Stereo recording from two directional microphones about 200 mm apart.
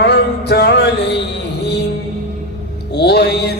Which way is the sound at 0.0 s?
55° left (ahead or behind).